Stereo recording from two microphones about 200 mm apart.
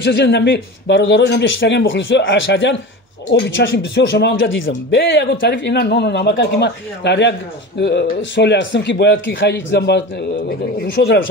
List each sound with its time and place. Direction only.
0.0 s speech: 60° left (ahead or behind)